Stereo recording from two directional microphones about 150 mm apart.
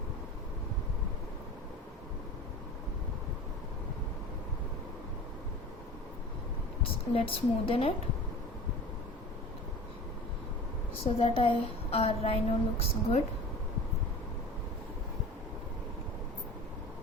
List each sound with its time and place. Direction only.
6.8 s a woman's voice: 35° left (ahead or behind)
11.0 s a woman's voice: 40° left (ahead or behind)